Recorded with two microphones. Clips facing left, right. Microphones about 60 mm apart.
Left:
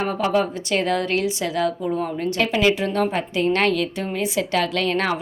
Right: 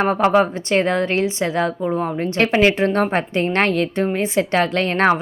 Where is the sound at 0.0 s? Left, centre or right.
Right.